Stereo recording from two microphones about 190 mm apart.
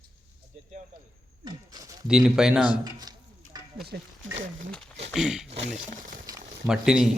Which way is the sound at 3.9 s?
55° right (ahead or behind).